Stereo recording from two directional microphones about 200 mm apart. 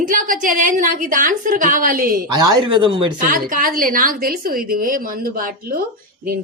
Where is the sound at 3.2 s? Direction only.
45° right (ahead or behind).